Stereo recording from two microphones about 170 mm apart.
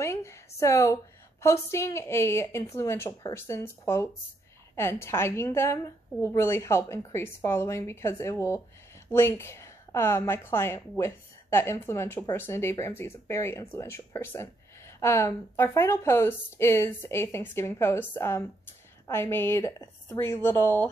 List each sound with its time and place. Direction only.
0.0 s a woman's voice: 15° left (ahead or behind)